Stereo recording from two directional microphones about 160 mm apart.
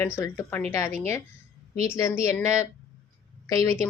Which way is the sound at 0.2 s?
15° left (ahead or behind).